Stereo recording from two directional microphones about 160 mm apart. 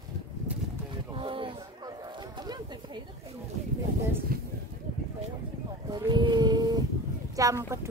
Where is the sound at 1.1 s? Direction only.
35° right (ahead or behind).